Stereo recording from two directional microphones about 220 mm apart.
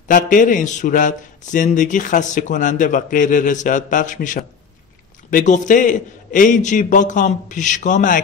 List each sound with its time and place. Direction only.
0.1 s a man's voice: 35° left (ahead or behind)